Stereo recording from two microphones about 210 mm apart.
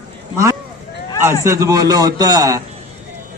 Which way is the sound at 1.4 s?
15° right (ahead or behind).